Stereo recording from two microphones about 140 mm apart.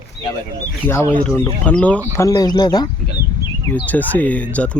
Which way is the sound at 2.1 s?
25° left (ahead or behind).